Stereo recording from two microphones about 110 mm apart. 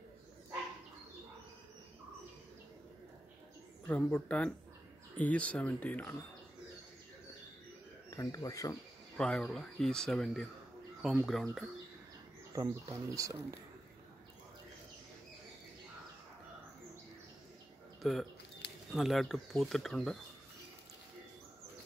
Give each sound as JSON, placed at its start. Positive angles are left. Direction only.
{"t": 3.8, "sound": "speech", "side_deg": 15}
{"t": 8.1, "sound": "speech", "side_deg": 30}
{"t": 9.1, "sound": "speech", "side_deg": 5}
{"t": 12.5, "sound": "speech", "side_deg": -35}
{"t": 18.0, "sound": "speech", "side_deg": 0}